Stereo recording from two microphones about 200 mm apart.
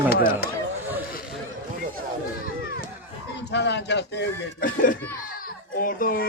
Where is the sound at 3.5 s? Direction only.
60° left (ahead or behind).